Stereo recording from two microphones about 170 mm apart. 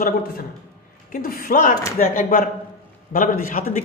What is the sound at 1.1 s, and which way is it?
A man's voice, 60° left (ahead or behind).